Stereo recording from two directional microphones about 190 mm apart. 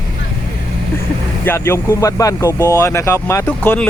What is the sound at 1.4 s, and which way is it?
Speech, 15° left (ahead or behind).